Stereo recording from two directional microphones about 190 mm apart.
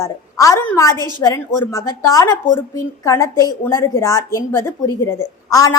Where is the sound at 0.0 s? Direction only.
15° left (ahead or behind).